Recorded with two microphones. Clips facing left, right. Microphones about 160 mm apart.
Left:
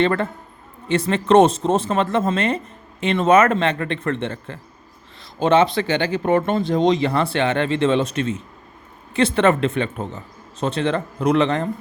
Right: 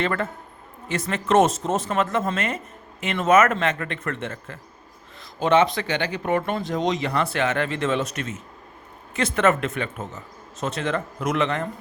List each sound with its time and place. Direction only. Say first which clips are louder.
0.0 s speech: left 6 dB; 30° left (ahead or behind)